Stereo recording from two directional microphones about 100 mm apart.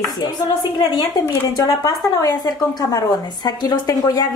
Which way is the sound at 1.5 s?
35° left (ahead or behind).